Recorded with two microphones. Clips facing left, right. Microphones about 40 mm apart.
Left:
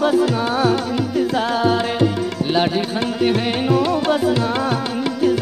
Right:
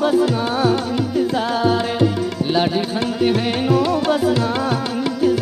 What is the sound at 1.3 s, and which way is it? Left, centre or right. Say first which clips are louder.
Music: even; left.